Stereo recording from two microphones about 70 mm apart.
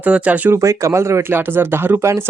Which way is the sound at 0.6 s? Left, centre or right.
Right.